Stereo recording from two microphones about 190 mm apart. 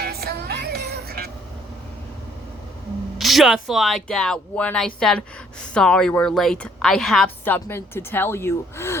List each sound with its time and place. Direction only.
0.0 s music: 55° right (ahead or behind)
3.2 s a woman's voice: centre (ahead or behind)